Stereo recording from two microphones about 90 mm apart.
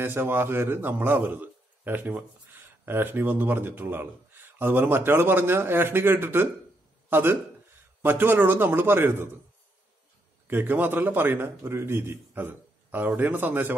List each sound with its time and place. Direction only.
0.0 s a man's voice: 25° right (ahead or behind)
10.4 s a man's voice: 25° right (ahead or behind)